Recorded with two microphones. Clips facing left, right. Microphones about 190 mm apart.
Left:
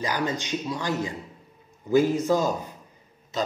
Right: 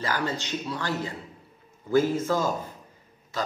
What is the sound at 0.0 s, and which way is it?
A man's voice, 15° left (ahead or behind).